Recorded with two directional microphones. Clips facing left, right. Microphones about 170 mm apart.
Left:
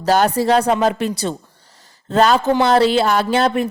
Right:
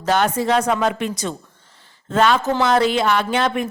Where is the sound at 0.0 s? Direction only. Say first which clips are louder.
Left 3 dB; 35° left (ahead or behind).